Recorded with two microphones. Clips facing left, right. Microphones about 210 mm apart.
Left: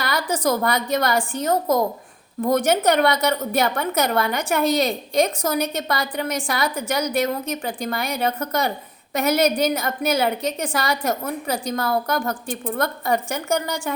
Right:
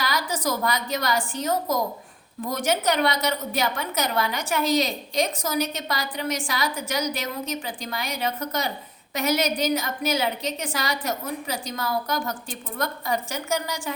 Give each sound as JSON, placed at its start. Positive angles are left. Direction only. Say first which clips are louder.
{"t": 0.0, "sound": "a woman's voice", "louder": "left 4 dB", "side_deg": 55}